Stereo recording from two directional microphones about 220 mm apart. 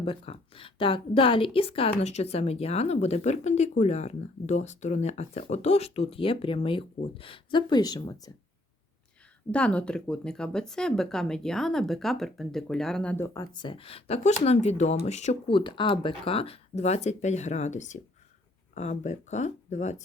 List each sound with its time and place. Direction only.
0.0 s a woman's voice: 25° left (ahead or behind)
9.5 s speech: 5° left (ahead or behind); by 20.0 s 30° left (ahead or behind)